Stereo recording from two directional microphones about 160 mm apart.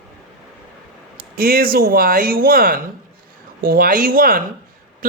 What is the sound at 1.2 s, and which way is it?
Speech, 65° right (ahead or behind).